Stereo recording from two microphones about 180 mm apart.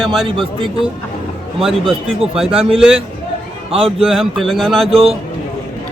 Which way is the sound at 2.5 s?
30° right (ahead or behind).